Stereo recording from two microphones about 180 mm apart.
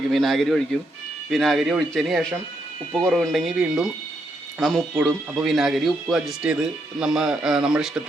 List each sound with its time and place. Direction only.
0.1 s speech: centre (ahead or behind)